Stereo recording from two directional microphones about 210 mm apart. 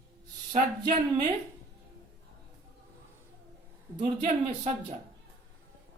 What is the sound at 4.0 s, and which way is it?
Speech, 25° right (ahead or behind).